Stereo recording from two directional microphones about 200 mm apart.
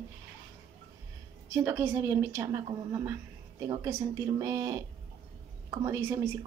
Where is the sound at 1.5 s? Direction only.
10° right (ahead or behind).